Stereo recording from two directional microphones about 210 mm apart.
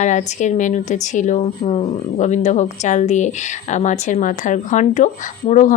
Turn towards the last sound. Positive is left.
turn(degrees=35)  # may be behind; listen again after turning